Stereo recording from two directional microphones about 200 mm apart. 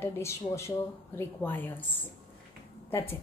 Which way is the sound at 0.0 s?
15° left (ahead or behind).